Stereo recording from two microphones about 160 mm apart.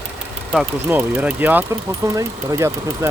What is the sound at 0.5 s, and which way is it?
Speech, 5° right (ahead or behind).